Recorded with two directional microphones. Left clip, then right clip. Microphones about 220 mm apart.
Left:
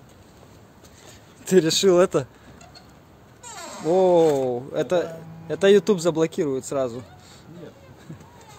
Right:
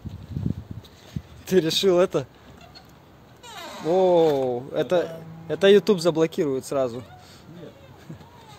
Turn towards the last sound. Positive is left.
turn(degrees=0)  # may be behind; listen again after turning